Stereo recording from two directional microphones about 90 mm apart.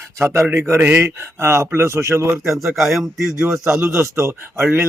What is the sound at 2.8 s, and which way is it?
Speech, 5° right (ahead or behind).